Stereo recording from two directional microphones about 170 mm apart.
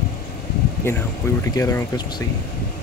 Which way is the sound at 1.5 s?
20° left (ahead or behind).